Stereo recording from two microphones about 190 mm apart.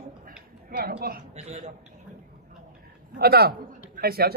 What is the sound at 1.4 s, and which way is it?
Speech, 35° right (ahead or behind).